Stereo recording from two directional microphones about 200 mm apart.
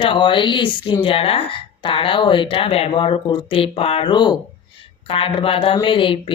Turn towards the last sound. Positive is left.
turn(degrees=25)  # may be behind; listen again after turning